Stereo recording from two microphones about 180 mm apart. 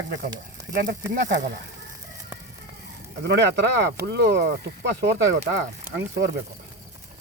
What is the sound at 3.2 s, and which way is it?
Speech, 70° right (ahead or behind).